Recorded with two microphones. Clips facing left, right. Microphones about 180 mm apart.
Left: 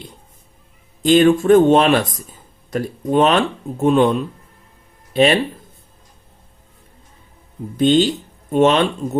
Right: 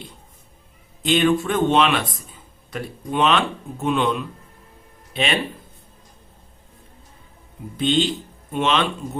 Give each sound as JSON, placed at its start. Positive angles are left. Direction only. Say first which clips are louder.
{"t": 1.0, "sound": "speech", "louder": "left 7 dB", "side_deg": 45}
{"t": 7.8, "sound": "speech", "louder": "left 6 dB", "side_deg": 45}